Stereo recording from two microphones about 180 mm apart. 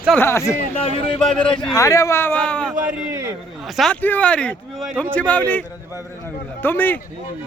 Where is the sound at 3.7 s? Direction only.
Centre (ahead or behind).